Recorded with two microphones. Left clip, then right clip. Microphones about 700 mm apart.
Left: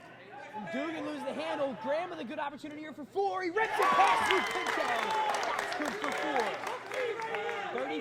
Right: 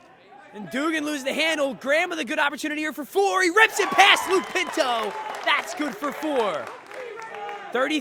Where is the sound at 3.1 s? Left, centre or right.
Right.